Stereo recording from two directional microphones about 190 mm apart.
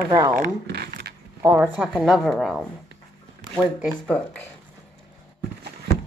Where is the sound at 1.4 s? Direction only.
10° right (ahead or behind).